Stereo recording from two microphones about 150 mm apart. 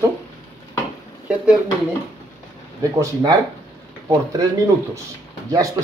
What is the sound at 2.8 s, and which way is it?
Speech, 20° right (ahead or behind).